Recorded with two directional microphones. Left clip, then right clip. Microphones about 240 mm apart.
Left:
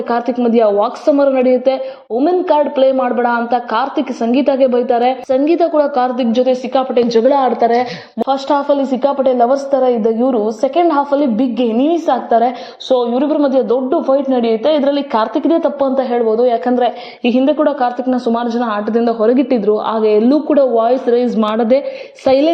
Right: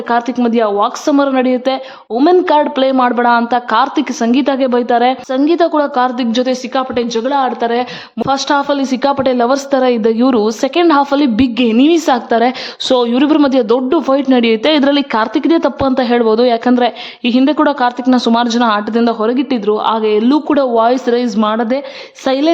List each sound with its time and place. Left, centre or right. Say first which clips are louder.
0.1 s a woman's voice: right 1 dB; centre
2.5 s a woman's voice: even; centre
13.1 s a woman's voice: right 2 dB; right
13.5 s a woman's voice: right 1 dB; right
14.2 s a woman's voice: right 2 dB; right
14.5 s a woman's voice: right 2 dB; right; by 22.5 s centre